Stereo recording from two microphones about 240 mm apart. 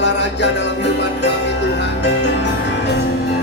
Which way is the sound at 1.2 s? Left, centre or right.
Left.